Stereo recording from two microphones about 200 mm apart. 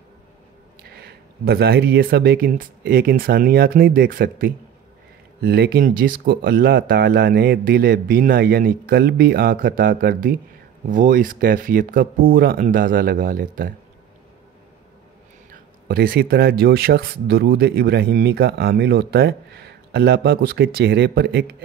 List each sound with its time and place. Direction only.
1.0 s speech: 50° right (ahead or behind)
15.5 s speech: 45° right (ahead or behind)